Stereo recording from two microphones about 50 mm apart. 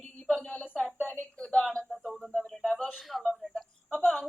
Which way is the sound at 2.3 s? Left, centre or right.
Centre.